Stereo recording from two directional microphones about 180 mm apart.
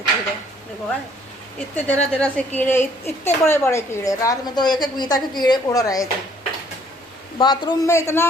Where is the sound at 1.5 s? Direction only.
5° left (ahead or behind).